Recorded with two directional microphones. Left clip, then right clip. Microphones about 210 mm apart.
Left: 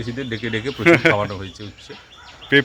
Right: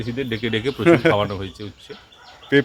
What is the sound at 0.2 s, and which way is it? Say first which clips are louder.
Speech: right 2 dB; 35° right (ahead or behind).